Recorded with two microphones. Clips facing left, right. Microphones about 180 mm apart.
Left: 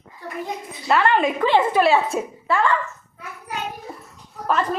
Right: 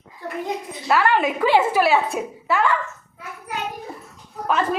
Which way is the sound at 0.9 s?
5° right (ahead or behind).